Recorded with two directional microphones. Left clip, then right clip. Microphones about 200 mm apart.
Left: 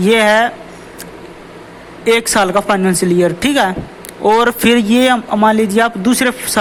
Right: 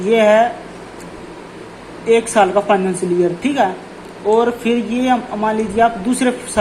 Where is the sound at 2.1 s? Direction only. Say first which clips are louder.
Left 1 dB; 35° left (ahead or behind).